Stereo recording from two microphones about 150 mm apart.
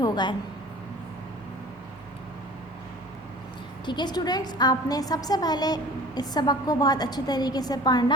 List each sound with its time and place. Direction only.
0.0 s a woman's voice: 30° left (ahead or behind)
3.8 s a woman's voice: 30° left (ahead or behind)